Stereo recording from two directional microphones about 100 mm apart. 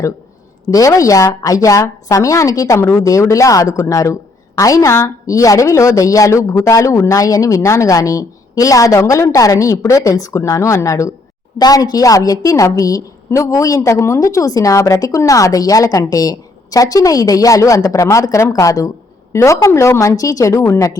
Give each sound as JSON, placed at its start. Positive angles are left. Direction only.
{"t": 0.7, "sound": "a woman's voice", "side_deg": 35}
{"t": 11.5, "sound": "a woman's voice", "side_deg": 40}